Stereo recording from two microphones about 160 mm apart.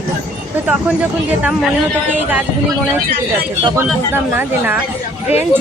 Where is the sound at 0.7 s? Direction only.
10° right (ahead or behind).